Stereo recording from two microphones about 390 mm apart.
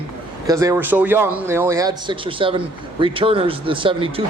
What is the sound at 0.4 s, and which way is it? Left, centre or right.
A man's voice, centre.